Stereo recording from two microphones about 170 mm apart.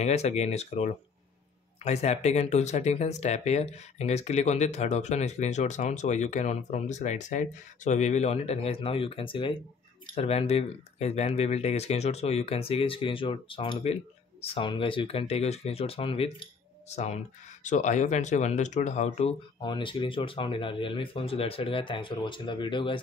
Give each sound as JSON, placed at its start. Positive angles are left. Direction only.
{"t": 0.0, "sound": "speech", "side_deg": 40}
{"t": 19.6, "sound": "speech", "side_deg": 30}